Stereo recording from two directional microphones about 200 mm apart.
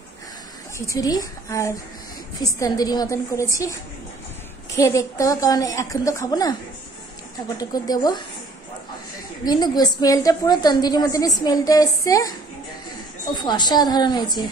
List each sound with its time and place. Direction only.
0.7 s a woman's voice: 15° left (ahead or behind)
4.7 s a woman's voice: 15° left (ahead or behind)
7.5 s a woman's voice: 20° left (ahead or behind)
9.4 s a woman's voice: 20° left (ahead or behind)
13.4 s a woman's voice: 20° left (ahead or behind)